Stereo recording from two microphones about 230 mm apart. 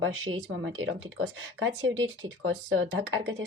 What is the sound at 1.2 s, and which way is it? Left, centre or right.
A woman's voice, right.